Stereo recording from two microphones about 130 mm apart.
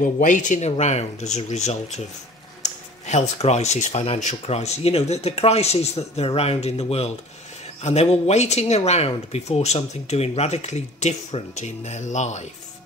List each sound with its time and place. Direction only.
0.0 s speech: 85° left; by 12.4 s 65° left (ahead or behind)